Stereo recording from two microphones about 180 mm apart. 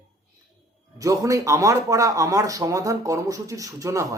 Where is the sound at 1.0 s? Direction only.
15° right (ahead or behind).